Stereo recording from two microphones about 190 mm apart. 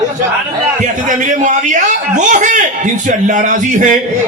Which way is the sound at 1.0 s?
40° right (ahead or behind).